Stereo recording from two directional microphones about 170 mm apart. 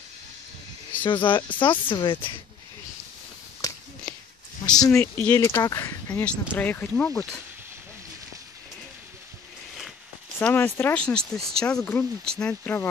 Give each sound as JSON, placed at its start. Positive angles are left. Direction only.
{"t": 1.0, "sound": "speech", "side_deg": 30}
{"t": 3.6, "sound": "a sound", "side_deg": 20}
{"t": 4.6, "sound": "speech", "side_deg": 20}
{"t": 10.4, "sound": "speech", "side_deg": 10}